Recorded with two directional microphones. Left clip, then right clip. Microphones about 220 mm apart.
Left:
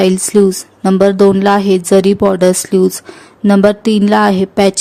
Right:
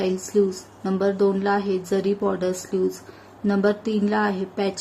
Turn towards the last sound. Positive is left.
turn(degrees=50)  # may be behind; listen again after turning